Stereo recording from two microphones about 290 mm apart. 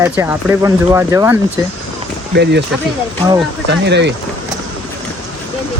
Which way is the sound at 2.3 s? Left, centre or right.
Right.